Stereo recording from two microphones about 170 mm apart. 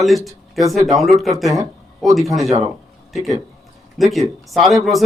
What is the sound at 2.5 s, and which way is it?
Speech, 35° right (ahead or behind).